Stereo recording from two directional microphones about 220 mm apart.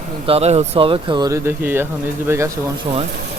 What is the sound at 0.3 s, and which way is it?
Speech, 30° right (ahead or behind).